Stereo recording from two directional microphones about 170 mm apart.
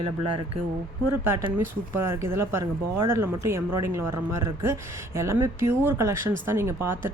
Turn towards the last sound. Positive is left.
turn(degrees=-15)  # may be behind; listen again after turning